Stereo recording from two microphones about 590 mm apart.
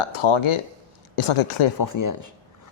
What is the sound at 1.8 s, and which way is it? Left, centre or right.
Speech, left.